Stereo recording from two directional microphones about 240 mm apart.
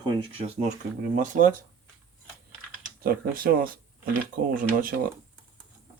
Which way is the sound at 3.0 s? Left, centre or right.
Right.